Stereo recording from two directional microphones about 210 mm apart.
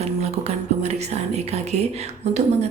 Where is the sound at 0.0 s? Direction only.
30° right (ahead or behind).